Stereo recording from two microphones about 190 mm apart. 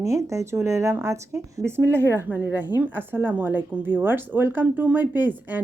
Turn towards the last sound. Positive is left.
turn(degrees=-10)  # may be behind; listen again after turning